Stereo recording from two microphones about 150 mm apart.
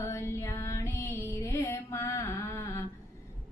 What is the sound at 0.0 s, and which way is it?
Music, 15° left (ahead or behind).